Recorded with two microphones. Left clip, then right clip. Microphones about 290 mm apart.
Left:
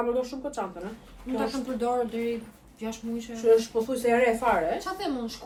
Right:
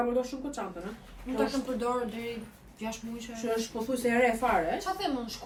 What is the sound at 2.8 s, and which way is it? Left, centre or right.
Speech, centre.